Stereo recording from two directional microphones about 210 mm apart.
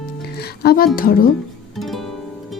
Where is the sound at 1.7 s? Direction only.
Centre (ahead or behind).